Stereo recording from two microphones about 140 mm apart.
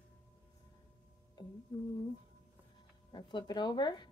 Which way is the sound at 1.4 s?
35° left (ahead or behind).